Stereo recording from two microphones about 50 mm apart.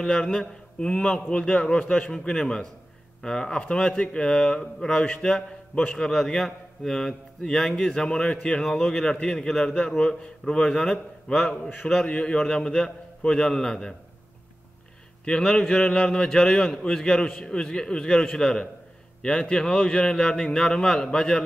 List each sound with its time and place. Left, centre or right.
0.0 s a man's voice: centre
15.2 s a man's voice: centre